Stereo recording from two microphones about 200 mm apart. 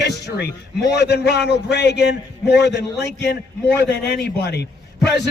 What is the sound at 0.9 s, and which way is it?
A man's voice, 55° left (ahead or behind).